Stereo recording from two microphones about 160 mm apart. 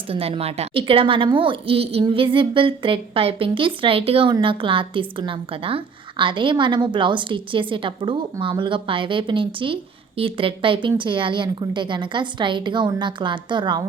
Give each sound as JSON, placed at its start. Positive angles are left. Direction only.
{"t": 0.1, "sound": "a woman's voice", "side_deg": -40}